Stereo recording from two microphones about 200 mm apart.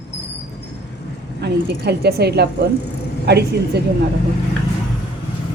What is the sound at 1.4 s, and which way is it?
A woman's voice, 55° right (ahead or behind).